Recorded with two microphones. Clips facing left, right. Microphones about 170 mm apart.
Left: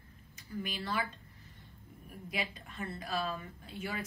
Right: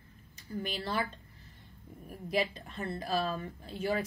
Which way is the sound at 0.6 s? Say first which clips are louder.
Right 2 dB; 35° right (ahead or behind).